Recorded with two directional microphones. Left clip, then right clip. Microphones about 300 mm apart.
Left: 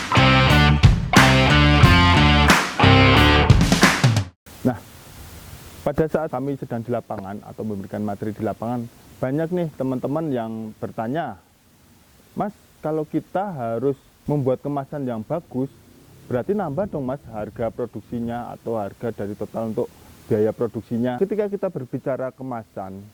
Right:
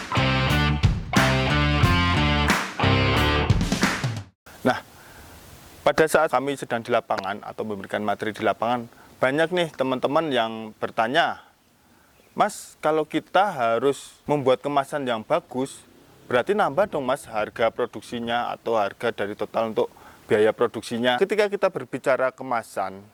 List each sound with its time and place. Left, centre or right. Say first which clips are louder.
0.1 s music: left 7 dB; centre
5.8 s speech: right 3 dB; centre
12.4 s speech: right 5 dB; centre